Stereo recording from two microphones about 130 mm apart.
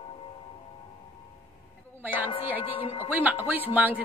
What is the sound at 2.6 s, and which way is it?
Speech, 40° left (ahead or behind).